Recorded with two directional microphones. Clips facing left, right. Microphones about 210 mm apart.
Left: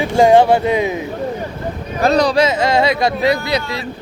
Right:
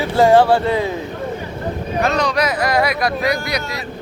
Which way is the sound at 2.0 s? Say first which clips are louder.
Left 6 dB; 35° left (ahead or behind).